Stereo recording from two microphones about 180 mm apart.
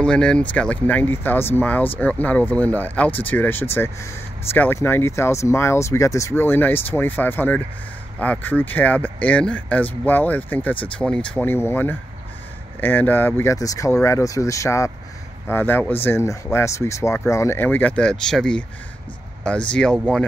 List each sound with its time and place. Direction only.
0.0 s speech: 5° left (ahead or behind)
19.7 s speech: 5° left (ahead or behind)